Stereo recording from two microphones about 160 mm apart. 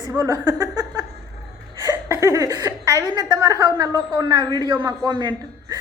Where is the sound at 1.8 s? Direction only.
20° right (ahead or behind).